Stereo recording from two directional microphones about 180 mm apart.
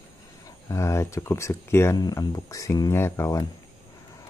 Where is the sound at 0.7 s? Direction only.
15° left (ahead or behind).